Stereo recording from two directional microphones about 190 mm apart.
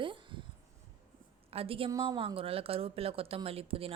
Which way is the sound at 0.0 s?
25° right (ahead or behind).